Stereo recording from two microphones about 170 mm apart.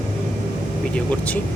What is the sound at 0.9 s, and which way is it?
Speech, 10° left (ahead or behind).